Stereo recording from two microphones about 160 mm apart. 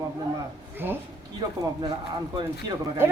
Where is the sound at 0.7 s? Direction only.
10° right (ahead or behind).